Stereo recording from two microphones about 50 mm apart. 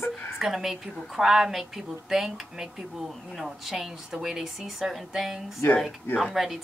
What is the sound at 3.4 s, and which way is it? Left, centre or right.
A woman's voice, centre.